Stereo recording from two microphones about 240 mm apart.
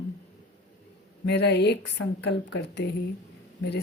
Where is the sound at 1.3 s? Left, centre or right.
Left.